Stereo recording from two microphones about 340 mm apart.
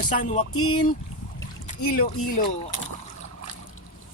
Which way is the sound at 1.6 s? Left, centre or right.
Left.